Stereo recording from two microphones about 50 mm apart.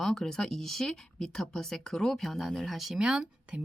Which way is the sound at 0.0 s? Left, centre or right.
Centre.